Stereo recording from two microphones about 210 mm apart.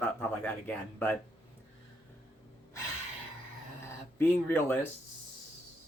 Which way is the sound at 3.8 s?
10° left (ahead or behind).